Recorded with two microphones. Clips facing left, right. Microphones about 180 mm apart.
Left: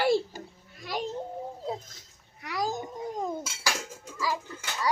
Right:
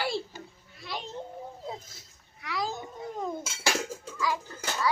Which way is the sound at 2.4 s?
45° left (ahead or behind).